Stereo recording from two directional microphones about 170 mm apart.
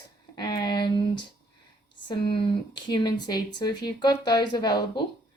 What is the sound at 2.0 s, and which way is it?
Speech, 30° left (ahead or behind).